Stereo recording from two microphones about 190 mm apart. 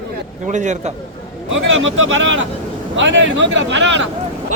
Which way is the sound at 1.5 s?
85° right.